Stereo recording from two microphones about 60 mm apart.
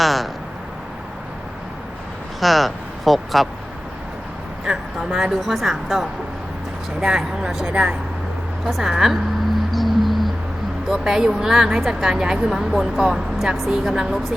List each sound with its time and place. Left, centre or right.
0.0 s a sound: centre
2.4 s speech: centre
4.9 s a woman's voice: centre
8.6 s a woman's voice: centre
9.7 s music: centre
10.8 s a woman's voice: centre